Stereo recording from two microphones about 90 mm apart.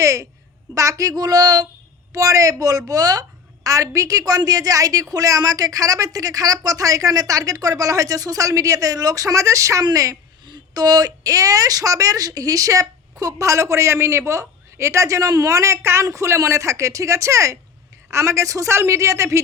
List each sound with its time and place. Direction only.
0.0 s a woman's voice: 35° right (ahead or behind)
10.4 s a woman's voice: 50° right (ahead or behind); by 19.4 s 35° right (ahead or behind)